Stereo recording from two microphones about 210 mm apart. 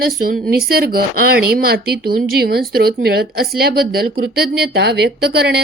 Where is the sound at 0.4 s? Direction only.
45° right (ahead or behind).